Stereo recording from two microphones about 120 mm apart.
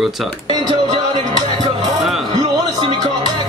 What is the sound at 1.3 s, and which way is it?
Music, 40° right (ahead or behind).